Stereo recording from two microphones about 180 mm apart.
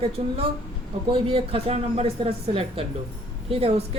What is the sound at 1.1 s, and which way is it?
A woman's voice, 30° right (ahead or behind).